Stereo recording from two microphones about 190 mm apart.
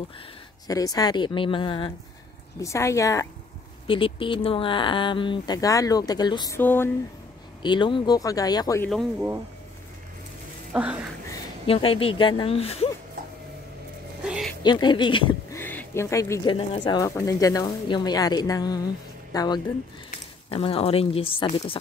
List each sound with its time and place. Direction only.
0.7 s speech: 20° left (ahead or behind)
2.6 s speech: 15° left (ahead or behind)
3.8 s speech: 25° left (ahead or behind); by 6.9 s 10° left (ahead or behind)
7.6 s speech: 25° left (ahead or behind)
10.7 s a sound: 5° right (ahead or behind)
11.6 s speech: 30° left (ahead or behind)
14.2 s a sound: 5° right (ahead or behind)
14.6 s speech: 25° left (ahead or behind)
15.5 s speech: 10° left (ahead or behind); by 17.0 s 30° left (ahead or behind)
17.0 s speech: 15° left (ahead or behind)